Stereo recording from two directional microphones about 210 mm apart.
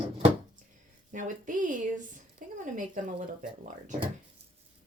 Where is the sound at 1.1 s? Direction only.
35° right (ahead or behind).